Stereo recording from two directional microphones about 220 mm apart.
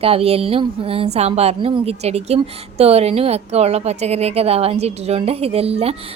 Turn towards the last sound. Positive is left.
turn(degrees=-25)  # may be behind; listen again after turning